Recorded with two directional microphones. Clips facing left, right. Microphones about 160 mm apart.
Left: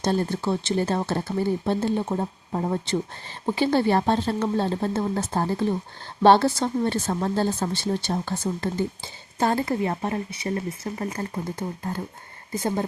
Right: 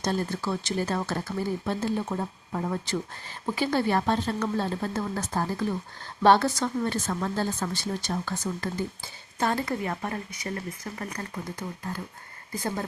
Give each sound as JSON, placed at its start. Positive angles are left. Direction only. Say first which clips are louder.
{"t": 0.0, "sound": "speech", "louder": "left 4 dB", "side_deg": 30}